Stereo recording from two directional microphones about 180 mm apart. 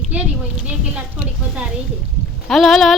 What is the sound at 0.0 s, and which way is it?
Speech, 5° right (ahead or behind).